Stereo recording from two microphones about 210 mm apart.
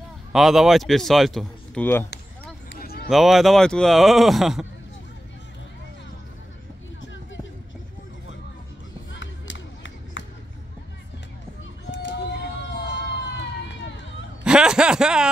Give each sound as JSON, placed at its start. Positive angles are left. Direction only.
{"t": 0.3, "sound": "speech", "side_deg": 0}
{"t": 2.7, "sound": "a sound", "side_deg": 50}
{"t": 3.1, "sound": "speech", "side_deg": 0}
{"t": 9.1, "sound": "music", "side_deg": 60}
{"t": 11.9, "sound": "run", "side_deg": 60}
{"t": 14.4, "sound": "a sound", "side_deg": -5}